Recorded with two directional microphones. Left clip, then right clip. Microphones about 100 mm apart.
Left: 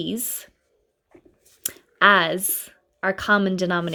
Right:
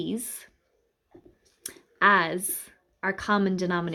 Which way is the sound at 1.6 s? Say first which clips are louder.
Left 5 dB; 50° left (ahead or behind).